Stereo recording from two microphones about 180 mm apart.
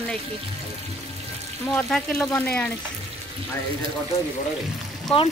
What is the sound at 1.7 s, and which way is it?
Speech, 5° left (ahead or behind).